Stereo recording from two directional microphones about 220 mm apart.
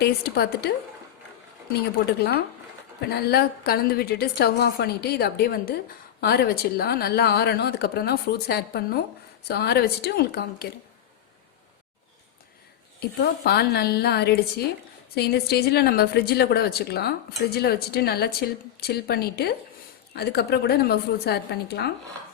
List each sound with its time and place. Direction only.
0.0 s a woman's voice: 45° left (ahead or behind)
3.0 s a woman's voice: 45° left (ahead or behind)
13.0 s a woman's voice: 45° left (ahead or behind)